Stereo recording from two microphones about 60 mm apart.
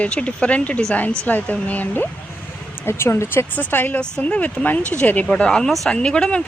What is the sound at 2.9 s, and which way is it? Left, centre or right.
Speech, left.